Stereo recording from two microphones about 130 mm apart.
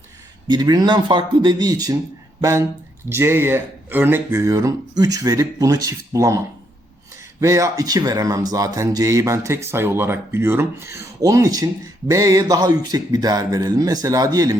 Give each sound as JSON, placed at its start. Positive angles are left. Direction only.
{"t": 0.4, "sound": "a man's voice", "side_deg": -35}